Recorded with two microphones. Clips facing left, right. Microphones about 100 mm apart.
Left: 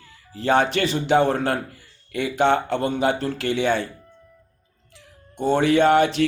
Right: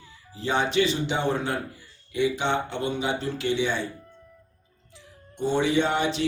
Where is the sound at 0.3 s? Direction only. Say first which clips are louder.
Left 4 dB; 60° left (ahead or behind).